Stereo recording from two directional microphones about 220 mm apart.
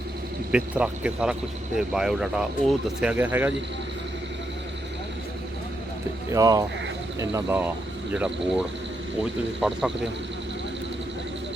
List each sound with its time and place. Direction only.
0.5 s speech: 5° right (ahead or behind)
6.3 s speech: 15° right (ahead or behind)